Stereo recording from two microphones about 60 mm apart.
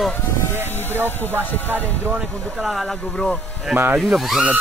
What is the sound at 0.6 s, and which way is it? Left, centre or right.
Speech, left.